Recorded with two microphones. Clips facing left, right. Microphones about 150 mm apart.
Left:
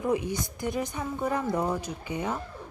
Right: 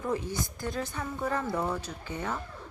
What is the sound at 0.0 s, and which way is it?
A woman's voice, 15° left (ahead or behind).